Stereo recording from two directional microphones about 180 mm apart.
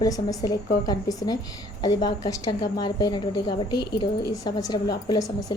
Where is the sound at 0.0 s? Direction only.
20° left (ahead or behind).